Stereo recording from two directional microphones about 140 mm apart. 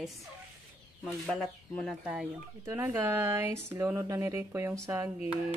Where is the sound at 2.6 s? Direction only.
15° right (ahead or behind).